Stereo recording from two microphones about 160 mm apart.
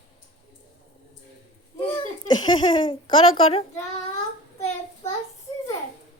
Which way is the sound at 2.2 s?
25° left (ahead or behind).